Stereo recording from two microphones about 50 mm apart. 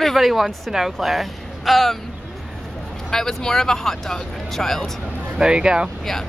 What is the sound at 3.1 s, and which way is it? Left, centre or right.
Speech, centre.